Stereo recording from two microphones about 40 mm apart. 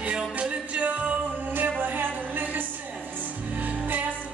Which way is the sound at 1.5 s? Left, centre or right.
Right.